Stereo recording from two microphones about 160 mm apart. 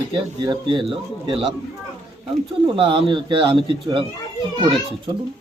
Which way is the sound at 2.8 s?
30° right (ahead or behind).